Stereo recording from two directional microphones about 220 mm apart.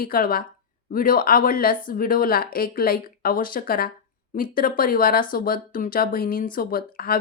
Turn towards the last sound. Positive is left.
turn(degrees=45)  # may be behind; listen again after turning